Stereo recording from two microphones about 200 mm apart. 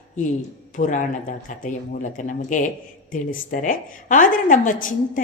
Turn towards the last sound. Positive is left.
turn(degrees=40)  # may be behind; listen again after turning